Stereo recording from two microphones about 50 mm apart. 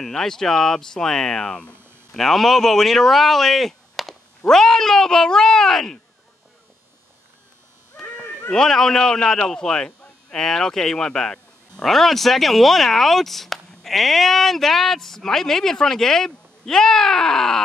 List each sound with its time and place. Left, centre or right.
0.0 s speech: centre
2.1 s speech: centre
8.0 s a sound: left
8.5 s speech: centre